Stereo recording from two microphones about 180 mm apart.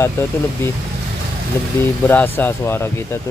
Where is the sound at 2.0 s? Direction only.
10° left (ahead or behind).